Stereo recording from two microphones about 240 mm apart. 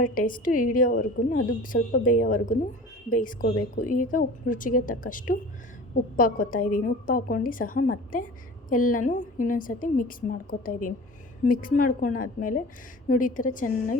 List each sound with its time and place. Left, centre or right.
0.0 s a woman's voice: left